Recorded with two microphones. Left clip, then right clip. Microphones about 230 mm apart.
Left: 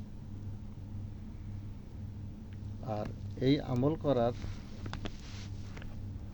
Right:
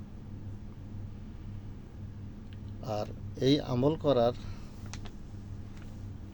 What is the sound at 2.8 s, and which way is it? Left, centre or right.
Speech, centre.